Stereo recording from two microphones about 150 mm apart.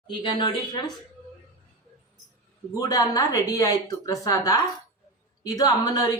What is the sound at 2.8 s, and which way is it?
Speech, 25° left (ahead or behind).